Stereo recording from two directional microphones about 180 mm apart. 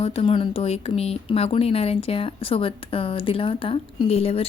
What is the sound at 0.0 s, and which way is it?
Speech, 30° left (ahead or behind).